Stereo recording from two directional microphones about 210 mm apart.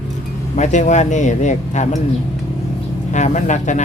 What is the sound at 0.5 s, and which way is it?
A man's voice, 35° left (ahead or behind).